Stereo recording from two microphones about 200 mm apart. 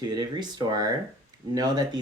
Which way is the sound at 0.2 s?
20° right (ahead or behind).